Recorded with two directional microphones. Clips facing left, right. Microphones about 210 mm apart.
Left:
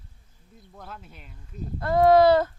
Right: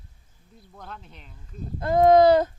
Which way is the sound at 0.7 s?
5° left (ahead or behind).